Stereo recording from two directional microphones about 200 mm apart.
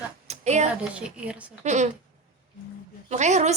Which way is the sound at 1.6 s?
35° right (ahead or behind).